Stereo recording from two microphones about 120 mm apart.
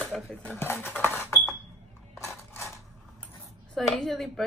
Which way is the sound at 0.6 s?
15° left (ahead or behind).